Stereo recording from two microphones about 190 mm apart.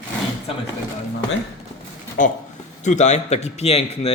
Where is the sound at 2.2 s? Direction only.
45° left (ahead or behind).